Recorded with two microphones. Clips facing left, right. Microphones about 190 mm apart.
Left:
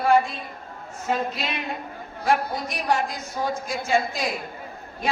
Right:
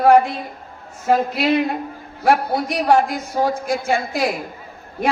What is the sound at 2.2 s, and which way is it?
A man's voice, 60° right (ahead or behind).